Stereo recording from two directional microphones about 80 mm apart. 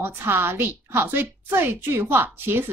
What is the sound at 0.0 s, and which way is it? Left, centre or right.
A woman's voice, right.